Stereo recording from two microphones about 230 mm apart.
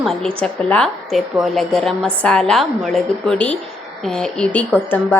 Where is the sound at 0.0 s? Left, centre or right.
Centre.